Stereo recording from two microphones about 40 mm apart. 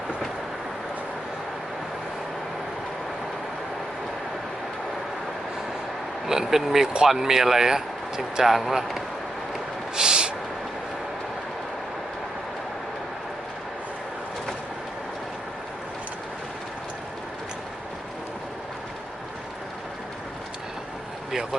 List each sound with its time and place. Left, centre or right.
6.2 s speech: centre
6.8 s speech: centre
7.1 s speech: centre
8.4 s speech: centre
9.9 s a sound: centre